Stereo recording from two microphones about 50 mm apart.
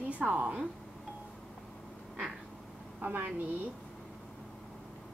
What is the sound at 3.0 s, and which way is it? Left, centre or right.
Speech, right.